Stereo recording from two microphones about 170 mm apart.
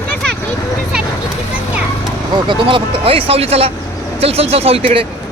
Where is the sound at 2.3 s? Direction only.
30° right (ahead or behind).